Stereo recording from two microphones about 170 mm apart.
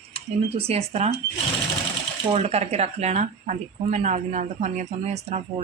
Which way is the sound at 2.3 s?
40° right (ahead or behind).